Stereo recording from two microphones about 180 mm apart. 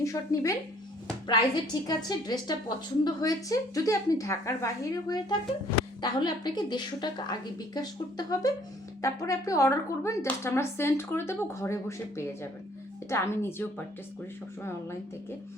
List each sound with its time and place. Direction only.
0.0 s speech: 15° left (ahead or behind)
1.9 s a woman's voice: 20° left (ahead or behind)